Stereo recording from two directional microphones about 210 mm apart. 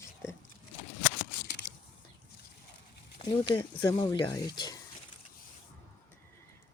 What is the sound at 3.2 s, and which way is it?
Speech, 25° left (ahead or behind).